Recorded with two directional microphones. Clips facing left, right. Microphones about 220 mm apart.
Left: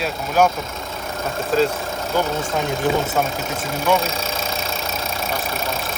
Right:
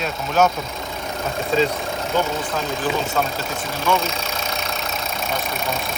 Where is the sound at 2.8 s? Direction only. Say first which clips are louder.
Left 3 dB; 20° left (ahead or behind).